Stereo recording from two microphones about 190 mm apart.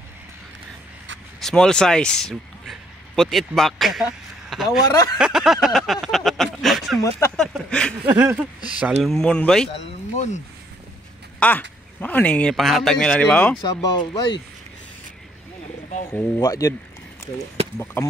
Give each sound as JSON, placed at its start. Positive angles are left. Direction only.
{"t": 1.4, "sound": "speech", "side_deg": 5}
{"t": 7.0, "sound": "speech", "side_deg": 15}
{"t": 7.3, "sound": "speech", "side_deg": 5}
{"t": 8.0, "sound": "speech", "side_deg": -10}
{"t": 9.0, "sound": "speech", "side_deg": 0}
{"t": 10.1, "sound": "speech", "side_deg": 35}
{"t": 11.3, "sound": "speech", "side_deg": 10}
{"t": 13.6, "sound": "speech", "side_deg": 20}
{"t": 16.1, "sound": "speech", "side_deg": 10}
{"t": 17.6, "sound": "a sound", "side_deg": -30}
{"t": 18.0, "sound": "speech", "side_deg": 15}